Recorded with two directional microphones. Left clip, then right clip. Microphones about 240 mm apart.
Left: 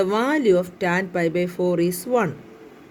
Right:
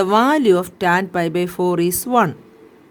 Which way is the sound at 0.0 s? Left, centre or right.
Right.